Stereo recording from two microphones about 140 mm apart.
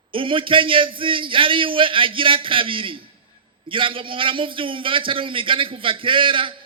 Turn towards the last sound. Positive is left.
turn(degrees=-40)  # may be behind; listen again after turning